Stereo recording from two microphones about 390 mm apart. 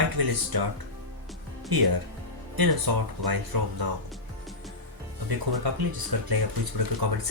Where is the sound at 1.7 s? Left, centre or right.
Right.